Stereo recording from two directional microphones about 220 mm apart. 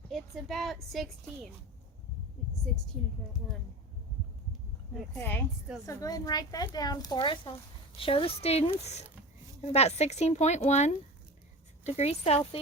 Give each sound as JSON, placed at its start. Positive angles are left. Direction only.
{"t": 0.1, "sound": "a woman's voice", "side_deg": 0}
{"t": 5.1, "sound": "speech", "side_deg": 10}